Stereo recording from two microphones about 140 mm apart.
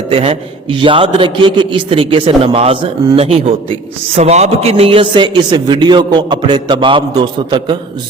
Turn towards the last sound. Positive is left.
turn(degrees=-35)  # may be behind; listen again after turning